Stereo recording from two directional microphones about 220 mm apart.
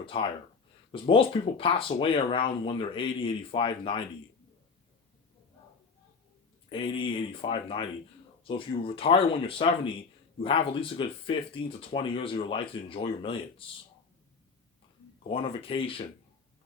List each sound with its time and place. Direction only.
0.0 s speech: 25° left (ahead or behind)
6.7 s speech: 25° left (ahead or behind)
15.3 s speech: 25° left (ahead or behind)